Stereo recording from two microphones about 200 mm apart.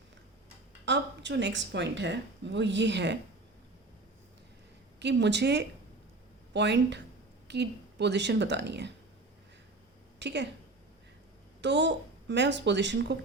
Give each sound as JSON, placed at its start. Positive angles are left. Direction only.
{"t": 0.9, "sound": "speech", "side_deg": -60}
{"t": 4.9, "sound": "a woman's voice", "side_deg": -60}
{"t": 10.2, "sound": "a woman's voice", "side_deg": -60}
{"t": 11.6, "sound": "a woman's voice", "side_deg": -60}